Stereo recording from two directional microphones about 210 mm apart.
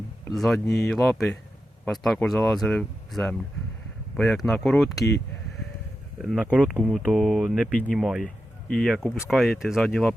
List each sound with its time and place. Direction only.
0.3 s speech: centre (ahead or behind)
6.2 s speech: 5° right (ahead or behind)